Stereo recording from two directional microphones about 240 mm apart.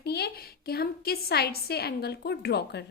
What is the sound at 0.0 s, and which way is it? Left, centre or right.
A woman's voice, left.